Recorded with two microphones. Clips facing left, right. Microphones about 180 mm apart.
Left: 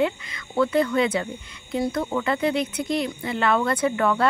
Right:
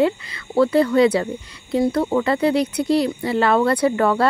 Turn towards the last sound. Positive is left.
turn(degrees=-35)  # may be behind; listen again after turning